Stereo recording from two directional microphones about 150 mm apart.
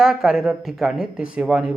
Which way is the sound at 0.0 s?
5° right (ahead or behind).